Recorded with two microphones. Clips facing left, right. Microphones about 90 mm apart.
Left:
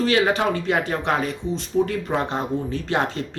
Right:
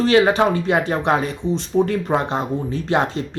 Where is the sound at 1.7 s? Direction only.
35° right (ahead or behind).